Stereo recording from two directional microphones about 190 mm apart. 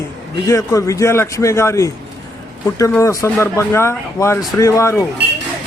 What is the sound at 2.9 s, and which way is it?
Speech, 15° left (ahead or behind).